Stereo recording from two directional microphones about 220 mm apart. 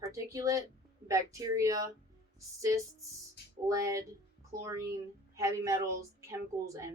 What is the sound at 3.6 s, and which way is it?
A woman's voice, 15° right (ahead or behind).